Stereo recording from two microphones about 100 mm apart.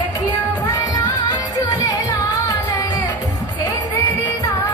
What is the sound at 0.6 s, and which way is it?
Music, 40° left (ahead or behind).